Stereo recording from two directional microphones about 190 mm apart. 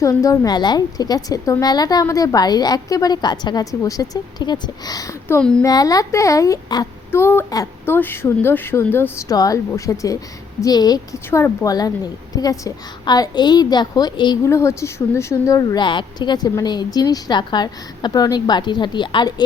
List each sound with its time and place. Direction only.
0.0 s a woman's voice: 15° left (ahead or behind)
5.4 s speech: 5° left (ahead or behind)
5.6 s a woman's voice: 20° left (ahead or behind)